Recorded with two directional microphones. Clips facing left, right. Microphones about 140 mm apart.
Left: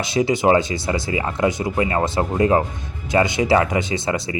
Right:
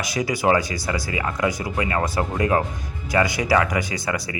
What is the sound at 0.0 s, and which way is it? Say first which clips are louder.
A man's voice: left 4 dB; 25° left (ahead or behind).